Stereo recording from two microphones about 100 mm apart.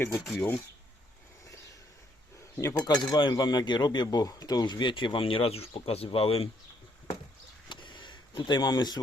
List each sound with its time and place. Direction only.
0.1 s speech: centre (ahead or behind)
2.4 s cutlery: 30° left (ahead or behind)
2.7 s cutlery: 45° left (ahead or behind); by 6.1 s 80° left
6.1 s speech: 75° left (ahead or behind)
7.7 s vehicle: 50° left (ahead or behind)